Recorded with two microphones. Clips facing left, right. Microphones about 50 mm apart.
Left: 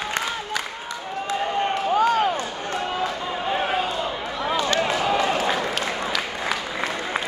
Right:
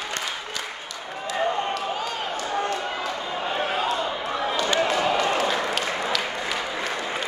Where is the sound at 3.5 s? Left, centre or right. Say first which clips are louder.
Left 3 dB; centre.